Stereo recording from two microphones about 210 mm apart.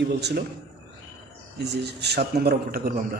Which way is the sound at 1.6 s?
55° right (ahead or behind).